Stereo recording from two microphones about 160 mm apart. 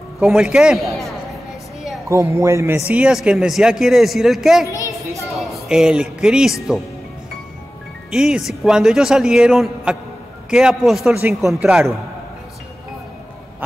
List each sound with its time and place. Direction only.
0.2 s a man's voice: 5° right (ahead or behind)
2.0 s speech: 20° right (ahead or behind)
2.9 s a man's voice: 5° right (ahead or behind)
4.6 s a sound: 20° left (ahead or behind)
5.4 s speech: centre (ahead or behind)
8.1 s a man's voice: 5° right (ahead or behind)